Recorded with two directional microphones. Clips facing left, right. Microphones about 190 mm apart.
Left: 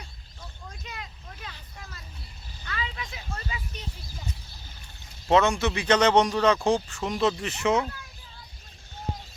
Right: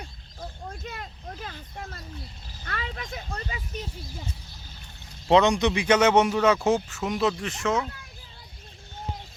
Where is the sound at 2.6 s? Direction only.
50° right (ahead or behind).